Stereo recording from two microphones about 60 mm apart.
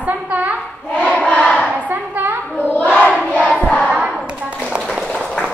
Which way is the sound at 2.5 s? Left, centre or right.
Left.